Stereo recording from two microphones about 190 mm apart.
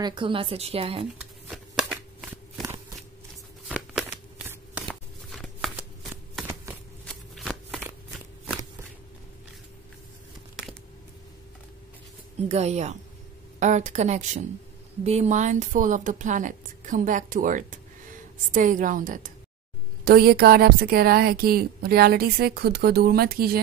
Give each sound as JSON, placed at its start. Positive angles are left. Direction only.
{"t": 0.0, "sound": "speech", "side_deg": -25}
{"t": 1.1, "sound": "shuffling cards", "side_deg": -5}
{"t": 3.6, "sound": "a sound", "side_deg": -5}
{"t": 4.5, "sound": "shuffling cards", "side_deg": -5}
{"t": 6.4, "sound": "shuffling cards", "side_deg": -10}
{"t": 7.1, "sound": "shuffling cards", "side_deg": 0}
{"t": 12.4, "sound": "a woman's voice", "side_deg": -35}